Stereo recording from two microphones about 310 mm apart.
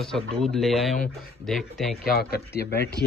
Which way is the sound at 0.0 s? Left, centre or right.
Centre.